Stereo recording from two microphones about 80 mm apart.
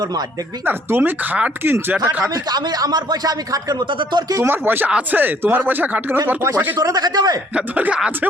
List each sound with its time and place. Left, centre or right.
0.6 s speech: right
2.5 s speech: right
3.8 s speech: right
4.4 s speech: right
6.7 s speech: right
7.5 s speech: centre